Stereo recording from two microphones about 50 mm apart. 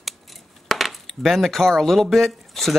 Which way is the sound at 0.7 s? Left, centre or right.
Centre.